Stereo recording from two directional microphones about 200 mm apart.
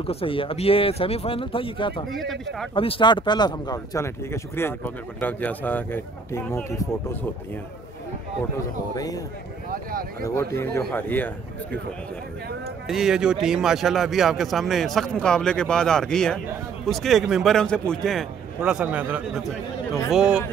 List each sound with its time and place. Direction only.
0.0 s speech: 30° left (ahead or behind)
2.0 s speech: centre (ahead or behind)
2.7 s speech: 25° left (ahead or behind)
8.9 s speech: 20° left (ahead or behind)
9.7 s a sound: 45° right (ahead or behind)
10.2 s speech: 15° left (ahead or behind)
12.8 s speech: centre (ahead or behind)